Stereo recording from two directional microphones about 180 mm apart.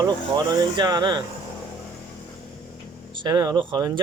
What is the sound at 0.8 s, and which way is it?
Speech, 25° right (ahead or behind).